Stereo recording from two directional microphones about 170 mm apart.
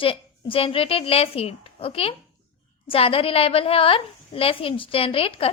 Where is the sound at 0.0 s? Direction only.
30° left (ahead or behind).